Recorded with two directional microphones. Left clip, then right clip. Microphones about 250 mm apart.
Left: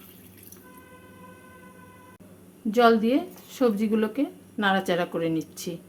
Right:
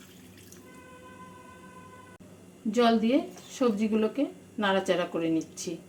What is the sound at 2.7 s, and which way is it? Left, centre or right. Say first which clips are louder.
Speech: left 4 dB; left.